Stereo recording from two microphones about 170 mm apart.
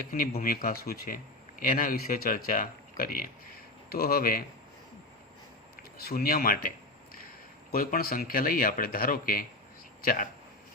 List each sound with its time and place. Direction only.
0.1 s speech: 55° left (ahead or behind)
6.0 s speech: 65° left (ahead or behind)